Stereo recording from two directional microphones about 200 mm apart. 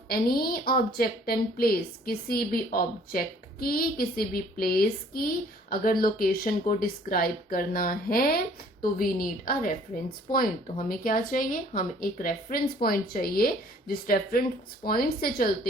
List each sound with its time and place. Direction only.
0.1 s a woman's voice: 50° left (ahead or behind)